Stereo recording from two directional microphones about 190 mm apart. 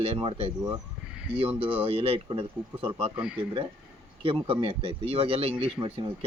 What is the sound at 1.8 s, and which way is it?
Speech, 30° right (ahead or behind).